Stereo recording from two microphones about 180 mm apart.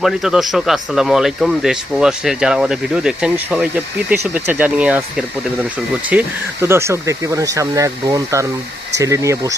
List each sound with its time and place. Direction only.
0.0 s speech: centre (ahead or behind); by 9.6 s 20° right (ahead or behind)